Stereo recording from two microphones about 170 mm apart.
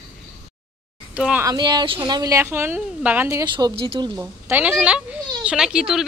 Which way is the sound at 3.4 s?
25° right (ahead or behind).